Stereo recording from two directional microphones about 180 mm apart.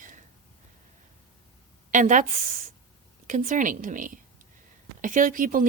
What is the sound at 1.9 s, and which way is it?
Speech, 45° right (ahead or behind).